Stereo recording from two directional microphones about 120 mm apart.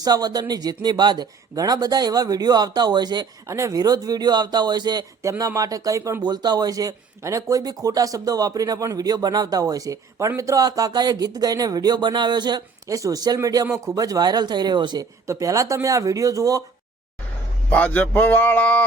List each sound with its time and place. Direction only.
0.0 s speech: 35° right (ahead or behind)
3.4 s speech: 25° right (ahead or behind)
5.2 s speech: 25° right (ahead or behind)
15.3 s speech: 30° right (ahead or behind)
17.7 s a sound: 15° left (ahead or behind)